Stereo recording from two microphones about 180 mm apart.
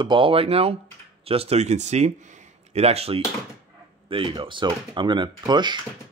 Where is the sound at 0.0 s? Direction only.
30° right (ahead or behind).